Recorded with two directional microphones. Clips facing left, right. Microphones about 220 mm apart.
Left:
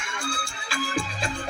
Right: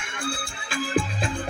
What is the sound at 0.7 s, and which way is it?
Music, 55° right (ahead or behind).